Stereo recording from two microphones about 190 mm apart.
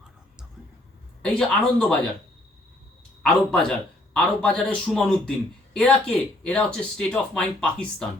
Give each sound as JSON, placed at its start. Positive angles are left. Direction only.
{"t": 1.2, "sound": "speech", "side_deg": 5}
{"t": 3.2, "sound": "speech", "side_deg": 5}